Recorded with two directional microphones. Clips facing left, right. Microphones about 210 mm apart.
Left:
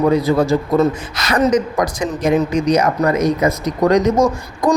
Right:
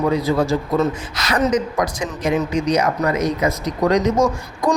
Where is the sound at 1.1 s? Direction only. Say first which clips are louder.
Left 3 dB; 50° left (ahead or behind).